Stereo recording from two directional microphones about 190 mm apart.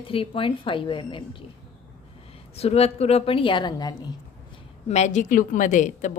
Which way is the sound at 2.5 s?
30° left (ahead or behind).